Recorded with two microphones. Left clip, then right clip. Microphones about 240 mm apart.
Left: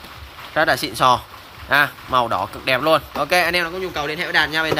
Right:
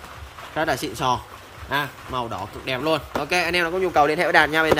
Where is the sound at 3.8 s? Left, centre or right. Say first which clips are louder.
Right 5 dB; centre.